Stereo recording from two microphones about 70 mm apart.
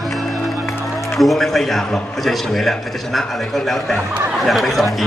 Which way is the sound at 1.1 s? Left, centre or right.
Centre.